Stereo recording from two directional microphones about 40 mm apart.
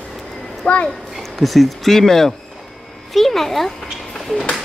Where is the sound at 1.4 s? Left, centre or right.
Centre.